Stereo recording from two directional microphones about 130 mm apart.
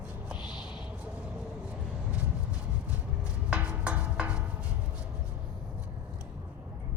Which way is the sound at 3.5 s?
10° right (ahead or behind).